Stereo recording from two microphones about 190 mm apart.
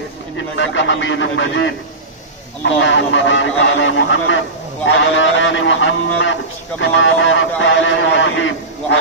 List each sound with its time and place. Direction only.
0.4 s a man's voice: 75° left (ahead or behind)